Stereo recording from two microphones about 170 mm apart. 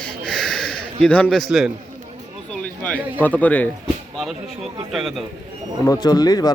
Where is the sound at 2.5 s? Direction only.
10° left (ahead or behind).